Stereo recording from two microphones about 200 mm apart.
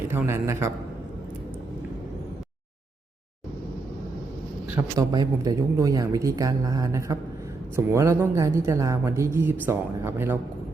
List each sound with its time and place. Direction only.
0.1 s a woman's voice: 10° right (ahead or behind)
4.9 s a woman's voice: 20° right (ahead or behind)